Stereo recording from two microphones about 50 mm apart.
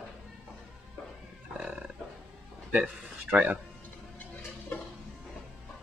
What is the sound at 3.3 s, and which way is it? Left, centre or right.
Speech, right.